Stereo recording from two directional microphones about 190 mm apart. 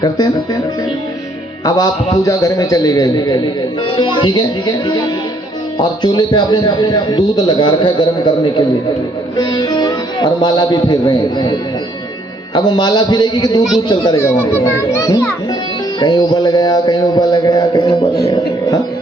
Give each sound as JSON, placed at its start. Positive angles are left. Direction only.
{"t": 0.0, "sound": "a man's voice", "side_deg": 20}
{"t": 1.6, "sound": "a man's voice", "side_deg": 20}
{"t": 12.5, "sound": "a man's voice", "side_deg": 25}